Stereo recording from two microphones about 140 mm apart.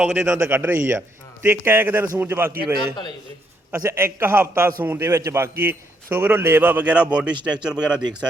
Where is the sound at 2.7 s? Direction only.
30° left (ahead or behind).